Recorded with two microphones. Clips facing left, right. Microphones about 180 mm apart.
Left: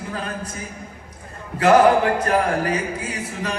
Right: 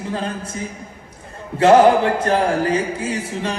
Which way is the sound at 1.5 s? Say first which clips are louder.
Right 3 dB; 30° right (ahead or behind).